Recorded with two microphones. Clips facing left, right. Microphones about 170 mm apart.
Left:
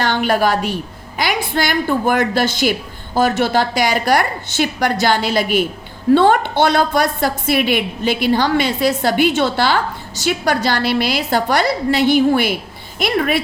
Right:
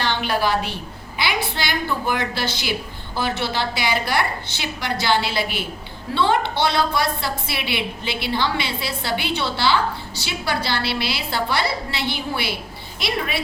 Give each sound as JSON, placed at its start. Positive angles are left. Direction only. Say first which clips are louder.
{"t": 0.0, "sound": "a woman's voice", "louder": "left 6 dB", "side_deg": 50}